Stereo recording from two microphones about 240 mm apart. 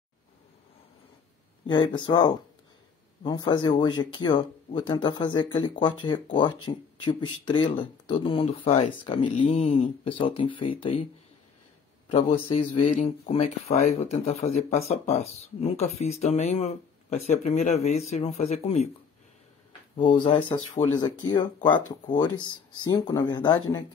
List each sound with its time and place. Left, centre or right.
1.7 s speech: centre
12.1 s speech: left
20.2 s speech: left
22.4 s speech: centre